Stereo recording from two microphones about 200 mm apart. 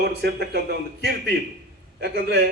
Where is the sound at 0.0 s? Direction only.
55° right (ahead or behind).